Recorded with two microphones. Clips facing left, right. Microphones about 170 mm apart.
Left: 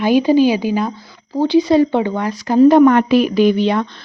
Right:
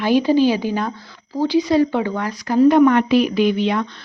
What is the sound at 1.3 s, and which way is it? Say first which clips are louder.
Speech: left 4 dB; 25° left (ahead or behind).